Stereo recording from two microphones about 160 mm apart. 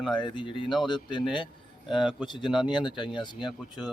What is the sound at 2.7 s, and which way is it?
Speech, 30° left (ahead or behind).